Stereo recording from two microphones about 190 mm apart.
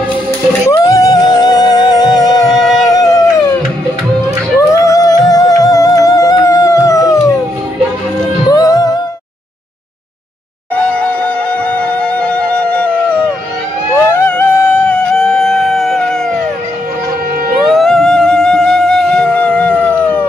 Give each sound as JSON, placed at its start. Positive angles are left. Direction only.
{"t": 0.7, "sound": "music", "side_deg": 20}
{"t": 2.8, "sound": "howl", "side_deg": 20}
{"t": 4.6, "sound": "music", "side_deg": 15}
{"t": 8.5, "sound": "music", "side_deg": 20}
{"t": 11.0, "sound": "music", "side_deg": 5}
{"t": 12.7, "sound": "howl", "side_deg": 5}
{"t": 13.9, "sound": "music", "side_deg": 10}
{"t": 17.6, "sound": "music", "side_deg": 0}